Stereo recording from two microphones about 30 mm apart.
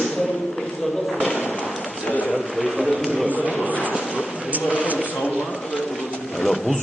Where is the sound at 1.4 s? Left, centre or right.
Left.